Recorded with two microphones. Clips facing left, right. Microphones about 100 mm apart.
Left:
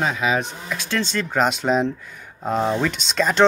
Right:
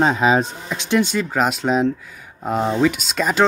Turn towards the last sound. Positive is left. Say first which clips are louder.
# even
turn(degrees=-5)  # may be behind; listen again after turning